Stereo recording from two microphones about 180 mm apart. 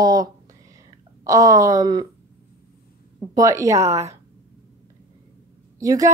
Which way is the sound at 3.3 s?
15° right (ahead or behind).